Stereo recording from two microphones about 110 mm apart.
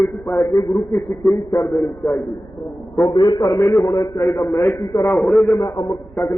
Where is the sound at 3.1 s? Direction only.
40° left (ahead or behind); by 5.0 s 25° left (ahead or behind).